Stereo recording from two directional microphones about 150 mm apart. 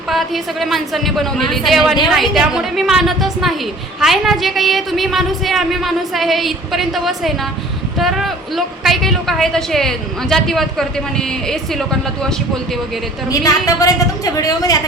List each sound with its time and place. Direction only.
0.1 s speech: centre (ahead or behind)
13.3 s a woman's voice: 20° left (ahead or behind)